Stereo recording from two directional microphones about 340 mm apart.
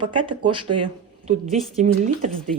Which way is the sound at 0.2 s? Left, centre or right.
Centre.